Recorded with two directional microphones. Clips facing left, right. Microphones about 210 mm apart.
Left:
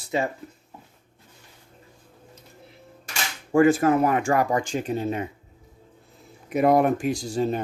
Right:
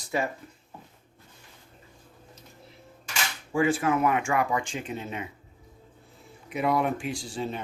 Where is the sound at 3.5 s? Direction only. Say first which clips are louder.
Left 7 dB; 45° left (ahead or behind).